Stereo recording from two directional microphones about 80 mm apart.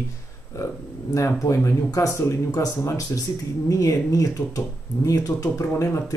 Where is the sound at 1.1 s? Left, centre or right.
Left.